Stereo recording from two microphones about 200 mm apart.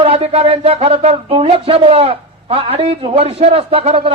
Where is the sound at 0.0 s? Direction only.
30° right (ahead or behind).